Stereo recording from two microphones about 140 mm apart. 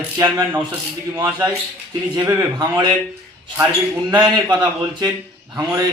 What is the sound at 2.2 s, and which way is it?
Speech, 25° right (ahead or behind).